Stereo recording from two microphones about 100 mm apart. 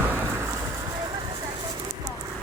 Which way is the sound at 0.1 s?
25° right (ahead or behind).